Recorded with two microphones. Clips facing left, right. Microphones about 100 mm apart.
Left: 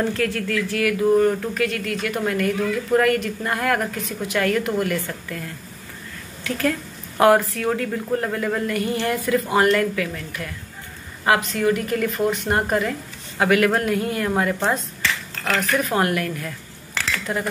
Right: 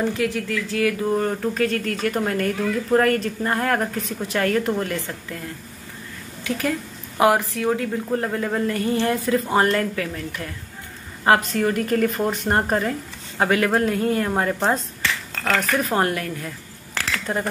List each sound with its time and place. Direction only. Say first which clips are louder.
0.1 s speech: left 1 dB; 20° right (ahead or behind)
7.2 s speech: left 2 dB; 20° right (ahead or behind)
17.3 s speech: right 1 dB; 35° right (ahead or behind)